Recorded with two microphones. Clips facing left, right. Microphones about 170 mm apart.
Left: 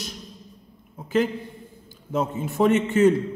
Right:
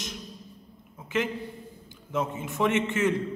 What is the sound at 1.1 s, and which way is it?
A man's voice, 35° left (ahead or behind).